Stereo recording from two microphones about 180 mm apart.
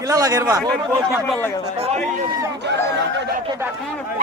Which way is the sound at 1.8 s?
35° right (ahead or behind).